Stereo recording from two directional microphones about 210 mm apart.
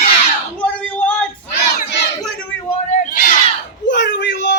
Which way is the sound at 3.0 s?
40° left (ahead or behind).